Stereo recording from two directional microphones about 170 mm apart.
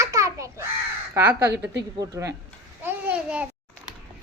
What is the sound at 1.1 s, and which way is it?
A woman's voice, 15° right (ahead or behind).